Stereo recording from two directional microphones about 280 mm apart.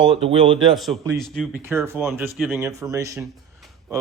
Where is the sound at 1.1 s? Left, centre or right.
Centre.